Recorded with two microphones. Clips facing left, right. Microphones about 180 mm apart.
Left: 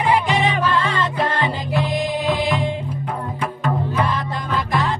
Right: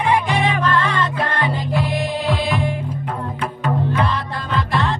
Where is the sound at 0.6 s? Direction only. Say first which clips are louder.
Right 1 dB; 10° left (ahead or behind).